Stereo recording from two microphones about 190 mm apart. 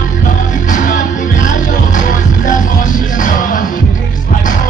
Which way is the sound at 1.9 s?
40° left (ahead or behind).